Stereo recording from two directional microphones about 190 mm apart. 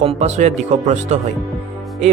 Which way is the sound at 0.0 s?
35° right (ahead or behind).